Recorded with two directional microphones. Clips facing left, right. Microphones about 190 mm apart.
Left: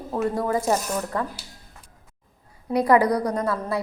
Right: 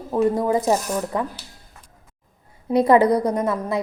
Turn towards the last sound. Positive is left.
turn(degrees=-20)  # may be behind; listen again after turning